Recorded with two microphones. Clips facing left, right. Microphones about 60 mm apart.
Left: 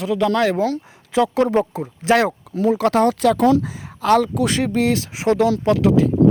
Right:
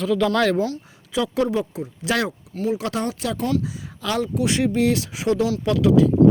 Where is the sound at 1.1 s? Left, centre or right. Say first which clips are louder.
Left 5 dB; left.